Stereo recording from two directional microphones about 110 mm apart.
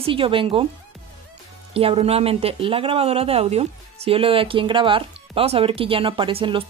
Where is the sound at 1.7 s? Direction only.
60° right (ahead or behind).